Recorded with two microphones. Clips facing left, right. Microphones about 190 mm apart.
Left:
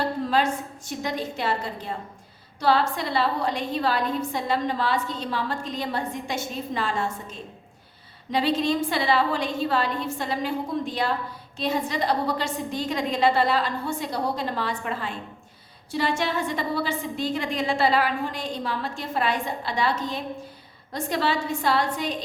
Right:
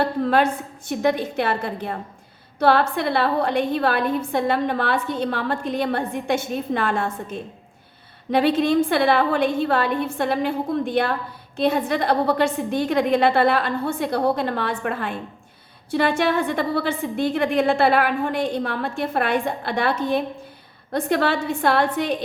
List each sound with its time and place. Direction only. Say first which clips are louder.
0.0 s a woman's voice: right 4 dB; 60° right (ahead or behind)